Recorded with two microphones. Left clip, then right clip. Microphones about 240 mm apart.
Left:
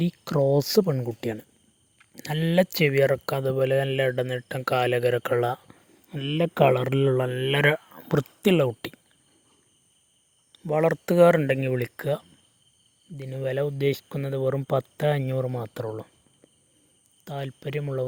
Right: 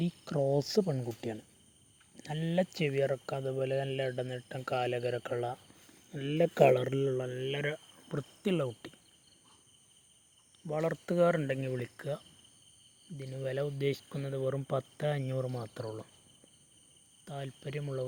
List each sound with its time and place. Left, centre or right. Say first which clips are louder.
0.0 s speech: left 9 dB; left
6.1 s speech: left 4 dB; left
10.5 s speech: left 11 dB; left
17.2 s speech: left 9 dB; left